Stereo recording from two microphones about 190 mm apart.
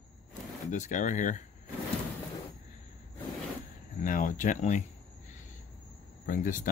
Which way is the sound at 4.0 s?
45° left (ahead or behind).